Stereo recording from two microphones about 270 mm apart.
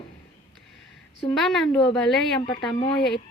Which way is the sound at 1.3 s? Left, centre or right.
Centre.